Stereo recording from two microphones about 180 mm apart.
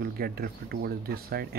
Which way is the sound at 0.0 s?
60° right (ahead or behind).